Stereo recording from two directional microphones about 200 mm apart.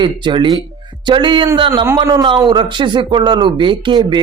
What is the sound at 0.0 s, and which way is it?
A man's voice, 25° right (ahead or behind).